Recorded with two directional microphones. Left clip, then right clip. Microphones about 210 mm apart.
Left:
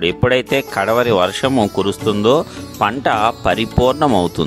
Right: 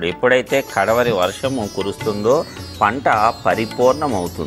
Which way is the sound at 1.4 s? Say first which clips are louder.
Left 6 dB; 30° left (ahead or behind).